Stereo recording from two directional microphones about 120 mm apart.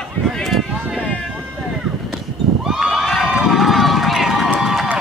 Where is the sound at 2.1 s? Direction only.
5° right (ahead or behind).